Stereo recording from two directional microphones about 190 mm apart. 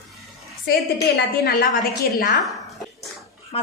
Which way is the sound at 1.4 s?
55° left (ahead or behind).